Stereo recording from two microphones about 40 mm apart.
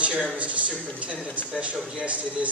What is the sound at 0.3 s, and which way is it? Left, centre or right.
Speech, right.